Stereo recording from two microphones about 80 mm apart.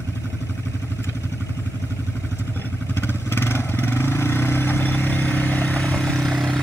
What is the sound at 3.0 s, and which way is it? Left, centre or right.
Vehicle, left.